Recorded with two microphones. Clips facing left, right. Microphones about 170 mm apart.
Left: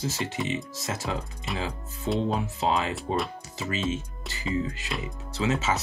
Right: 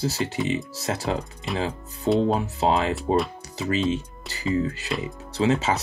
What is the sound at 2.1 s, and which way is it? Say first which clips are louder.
Speech: right 6 dB; 35° right (ahead or behind).